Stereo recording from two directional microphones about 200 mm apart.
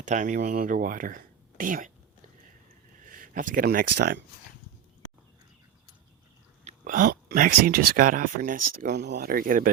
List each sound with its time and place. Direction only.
0.0 s speech: 40° right (ahead or behind)
3.1 s speech: 45° right (ahead or behind)
6.7 s speech: 40° right (ahead or behind)